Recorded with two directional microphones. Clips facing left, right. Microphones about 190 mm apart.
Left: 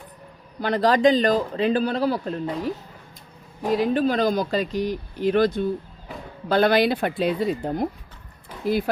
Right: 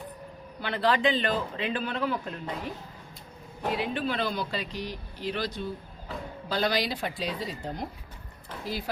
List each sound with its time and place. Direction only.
0.6 s a man's voice: 40° left (ahead or behind)